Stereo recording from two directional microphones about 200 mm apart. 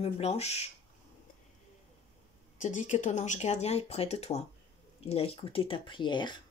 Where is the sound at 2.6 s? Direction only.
40° left (ahead or behind).